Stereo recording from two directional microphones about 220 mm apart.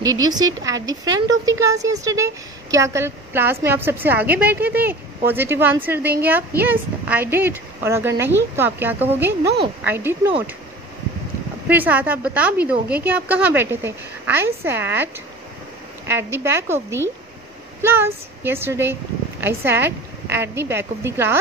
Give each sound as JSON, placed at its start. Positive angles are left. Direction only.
{"t": 0.1, "sound": "speech", "side_deg": -20}
{"t": 11.6, "sound": "speech", "side_deg": -10}
{"t": 16.1, "sound": "speech", "side_deg": -10}